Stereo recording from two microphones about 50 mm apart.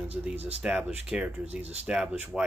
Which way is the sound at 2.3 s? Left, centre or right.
Centre.